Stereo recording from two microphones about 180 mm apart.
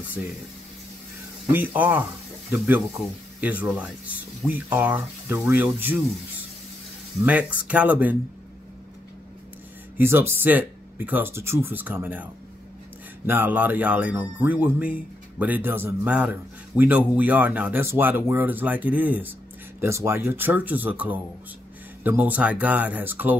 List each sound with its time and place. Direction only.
1.5 s speech: 10° right (ahead or behind)
7.2 s speech: 10° right (ahead or behind)
9.9 s speech: 10° right (ahead or behind)
13.3 s speech: 10° right (ahead or behind)